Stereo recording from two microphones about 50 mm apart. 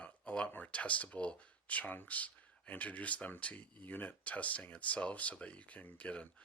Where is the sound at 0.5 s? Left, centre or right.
Left.